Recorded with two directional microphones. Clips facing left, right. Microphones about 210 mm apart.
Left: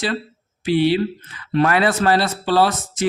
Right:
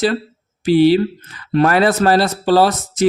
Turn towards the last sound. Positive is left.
turn(degrees=-40)  # may be behind; listen again after turning